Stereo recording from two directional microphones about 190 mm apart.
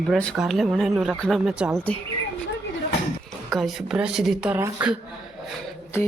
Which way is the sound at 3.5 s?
Centre (ahead or behind).